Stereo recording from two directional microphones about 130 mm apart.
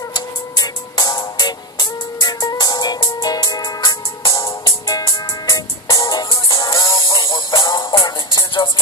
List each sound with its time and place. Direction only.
0.1 s music: 30° left (ahead or behind)
7.1 s music: 35° left (ahead or behind)